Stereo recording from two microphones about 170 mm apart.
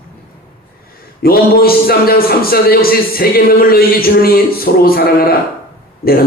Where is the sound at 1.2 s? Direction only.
60° left (ahead or behind).